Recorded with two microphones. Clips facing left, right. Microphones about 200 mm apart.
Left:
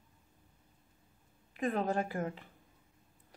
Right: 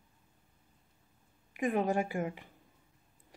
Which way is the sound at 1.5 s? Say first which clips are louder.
Right 2 dB; 15° right (ahead or behind).